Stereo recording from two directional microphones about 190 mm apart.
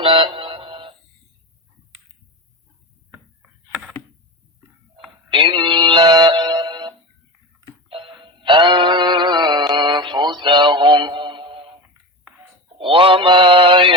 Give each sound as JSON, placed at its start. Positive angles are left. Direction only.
{"t": 0.0, "sound": "music", "side_deg": -25}
{"t": 5.3, "sound": "synthetic singing", "side_deg": -25}
{"t": 7.9, "sound": "music", "side_deg": -30}
{"t": 12.8, "sound": "music", "side_deg": -25}